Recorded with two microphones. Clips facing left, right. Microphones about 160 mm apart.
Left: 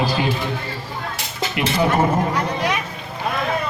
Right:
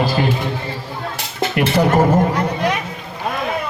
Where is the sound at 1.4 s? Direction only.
55° right (ahead or behind).